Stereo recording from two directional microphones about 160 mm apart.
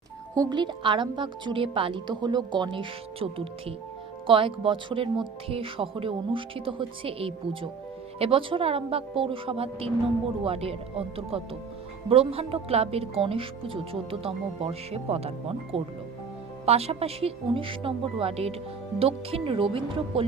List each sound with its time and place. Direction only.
0.3 s a woman's voice: 30° right (ahead or behind)